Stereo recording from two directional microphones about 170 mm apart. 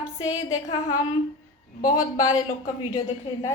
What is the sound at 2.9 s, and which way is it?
Speech, 20° left (ahead or behind).